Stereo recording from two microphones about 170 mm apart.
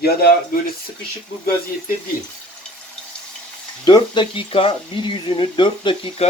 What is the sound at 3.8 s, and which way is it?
Speech, 25° left (ahead or behind).